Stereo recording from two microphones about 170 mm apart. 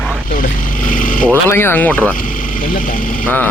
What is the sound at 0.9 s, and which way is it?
Speech, 55° left (ahead or behind).